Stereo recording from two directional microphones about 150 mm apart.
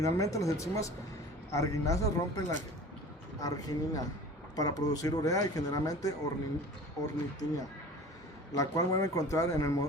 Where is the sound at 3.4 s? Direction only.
25° left (ahead or behind).